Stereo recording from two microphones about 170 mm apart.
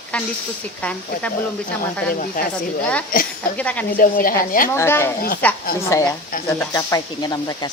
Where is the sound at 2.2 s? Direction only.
55° left (ahead or behind).